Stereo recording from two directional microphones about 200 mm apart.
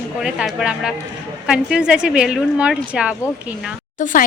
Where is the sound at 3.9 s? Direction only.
40° left (ahead or behind).